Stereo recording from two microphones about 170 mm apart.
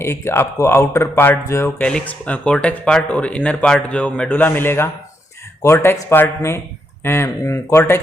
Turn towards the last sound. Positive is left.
turn(degrees=15)  # may be behind; listen again after turning